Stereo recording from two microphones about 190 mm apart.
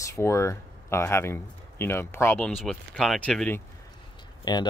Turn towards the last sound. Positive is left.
turn(degrees=20)  # may be behind; listen again after turning